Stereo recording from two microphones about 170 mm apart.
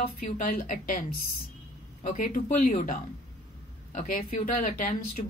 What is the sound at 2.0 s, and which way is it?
Speech, 50° left (ahead or behind).